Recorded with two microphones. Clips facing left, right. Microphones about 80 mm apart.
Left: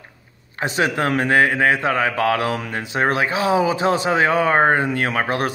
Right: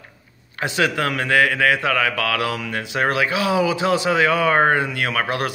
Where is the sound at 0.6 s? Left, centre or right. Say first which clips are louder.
Left 1 dB; left.